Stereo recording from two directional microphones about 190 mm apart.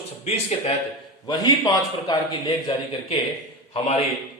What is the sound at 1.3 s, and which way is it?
Speech, 20° left (ahead or behind).